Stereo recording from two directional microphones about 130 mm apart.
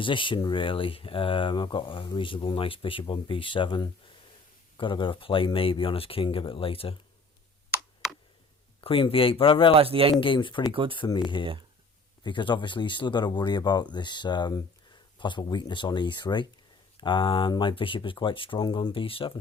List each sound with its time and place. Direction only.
0.0 s speech: 40° left (ahead or behind)
8.8 s speech: 45° left (ahead or behind)
9.7 s a man's voice: 45° right (ahead or behind)
10.2 s speech: 40° left (ahead or behind)
10.7 s speech: 40° right (ahead or behind)
10.9 s speech: 40° left (ahead or behind)
12.2 s speech: 35° left (ahead or behind)